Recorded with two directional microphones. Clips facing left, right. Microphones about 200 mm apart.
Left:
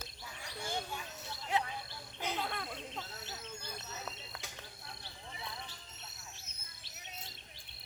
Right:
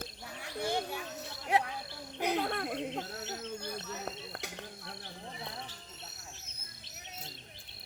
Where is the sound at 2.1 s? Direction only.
60° right (ahead or behind).